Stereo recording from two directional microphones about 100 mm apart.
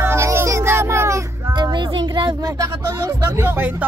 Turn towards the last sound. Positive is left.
turn(degrees=-25)  # may be behind; listen again after turning